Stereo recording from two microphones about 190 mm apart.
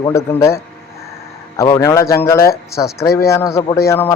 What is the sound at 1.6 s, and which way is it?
Speech, 15° left (ahead or behind).